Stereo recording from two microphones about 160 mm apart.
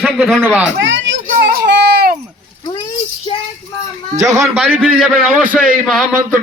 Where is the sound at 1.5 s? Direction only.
90° right.